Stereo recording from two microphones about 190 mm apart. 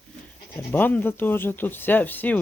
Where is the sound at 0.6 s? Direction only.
10° left (ahead or behind).